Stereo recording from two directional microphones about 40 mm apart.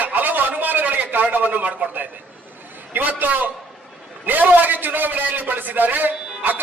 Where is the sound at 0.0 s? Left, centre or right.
Right.